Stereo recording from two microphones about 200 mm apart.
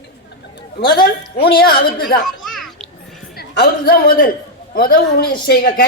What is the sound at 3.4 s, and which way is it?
A man's voice, 50° left (ahead or behind).